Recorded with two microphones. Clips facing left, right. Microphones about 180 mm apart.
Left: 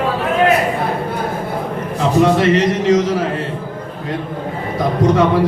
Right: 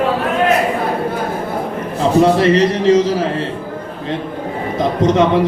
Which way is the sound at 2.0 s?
35° right (ahead or behind).